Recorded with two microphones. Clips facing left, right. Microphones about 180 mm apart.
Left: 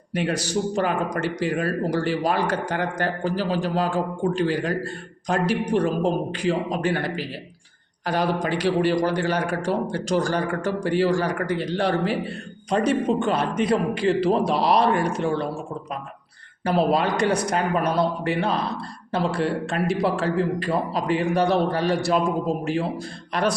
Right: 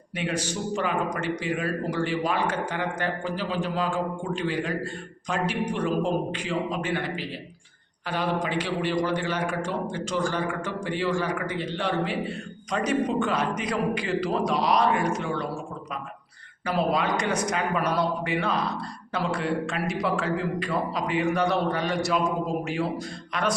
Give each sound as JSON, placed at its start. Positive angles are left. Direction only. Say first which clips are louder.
{"t": 0.1, "sound": "a man's voice", "louder": "left 5 dB", "side_deg": 40}
{"t": 16.6, "sound": "a man's voice", "louder": "left 4 dB", "side_deg": 35}